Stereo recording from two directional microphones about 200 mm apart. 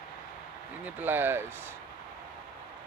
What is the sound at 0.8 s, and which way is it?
Speech, 10° right (ahead or behind).